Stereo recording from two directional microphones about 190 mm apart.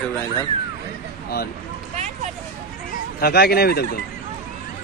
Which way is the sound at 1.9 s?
35° right (ahead or behind).